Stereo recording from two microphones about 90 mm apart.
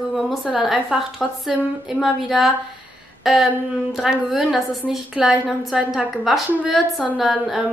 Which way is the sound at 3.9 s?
5° right (ahead or behind).